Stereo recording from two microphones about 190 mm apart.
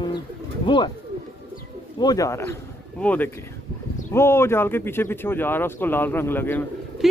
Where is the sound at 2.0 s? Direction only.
20° left (ahead or behind).